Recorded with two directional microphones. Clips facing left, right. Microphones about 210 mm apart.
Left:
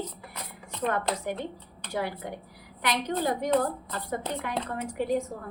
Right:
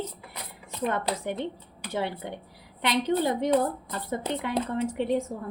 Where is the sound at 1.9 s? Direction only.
25° right (ahead or behind).